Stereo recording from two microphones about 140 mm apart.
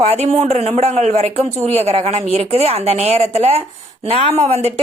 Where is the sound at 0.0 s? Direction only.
50° right (ahead or behind).